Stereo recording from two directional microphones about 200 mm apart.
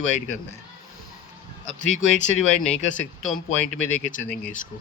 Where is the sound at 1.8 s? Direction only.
35° left (ahead or behind).